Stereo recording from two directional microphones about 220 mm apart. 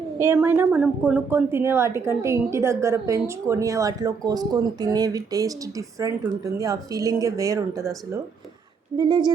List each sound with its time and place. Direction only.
0.2 s a woman's voice: 10° right (ahead or behind)
9.0 s speech: 20° right (ahead or behind)